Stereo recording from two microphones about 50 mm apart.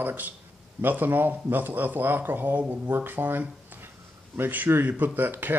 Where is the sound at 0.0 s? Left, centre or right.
Right.